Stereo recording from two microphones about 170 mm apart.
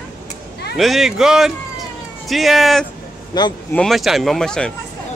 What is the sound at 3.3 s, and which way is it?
Speech, 25° left (ahead or behind).